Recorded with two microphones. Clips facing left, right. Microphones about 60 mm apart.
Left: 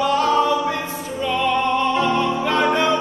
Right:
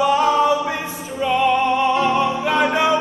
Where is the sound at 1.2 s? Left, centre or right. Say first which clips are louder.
Right 3 dB; centre.